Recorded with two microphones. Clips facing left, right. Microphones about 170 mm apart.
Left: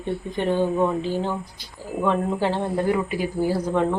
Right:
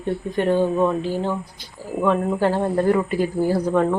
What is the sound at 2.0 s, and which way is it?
Speech, centre (ahead or behind).